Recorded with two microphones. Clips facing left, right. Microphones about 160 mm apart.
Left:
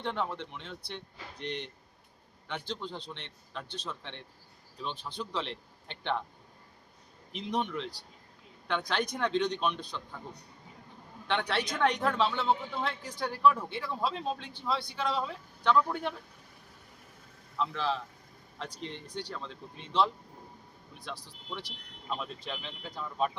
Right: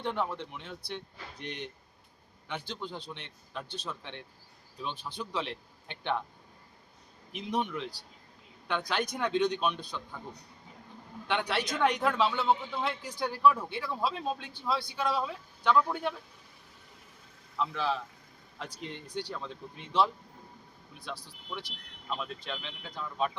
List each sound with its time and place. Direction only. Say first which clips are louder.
0.0 s speech: right 1 dB; 5° right (ahead or behind)
7.3 s speech: even; 10° right (ahead or behind)
11.3 s speech: even; 5° right (ahead or behind)
17.6 s speech: even; 5° right (ahead or behind)